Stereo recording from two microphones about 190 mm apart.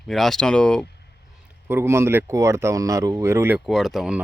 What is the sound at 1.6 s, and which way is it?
Speech, 10° right (ahead or behind).